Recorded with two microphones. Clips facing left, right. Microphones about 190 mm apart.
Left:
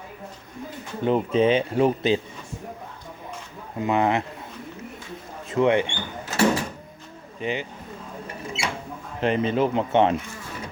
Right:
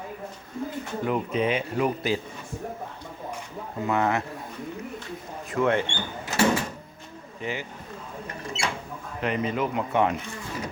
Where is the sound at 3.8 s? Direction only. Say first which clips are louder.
Left 3 dB; 20° left (ahead or behind).